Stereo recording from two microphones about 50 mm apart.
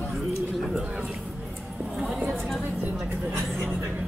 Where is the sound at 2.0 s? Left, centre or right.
Centre.